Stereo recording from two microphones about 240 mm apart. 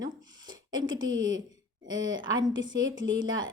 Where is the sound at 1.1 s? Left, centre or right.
Centre.